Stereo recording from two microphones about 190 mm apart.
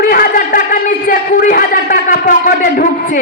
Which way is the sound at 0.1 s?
45° left (ahead or behind).